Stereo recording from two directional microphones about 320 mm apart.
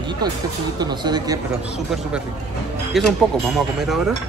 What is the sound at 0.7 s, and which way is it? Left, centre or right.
Speech, centre.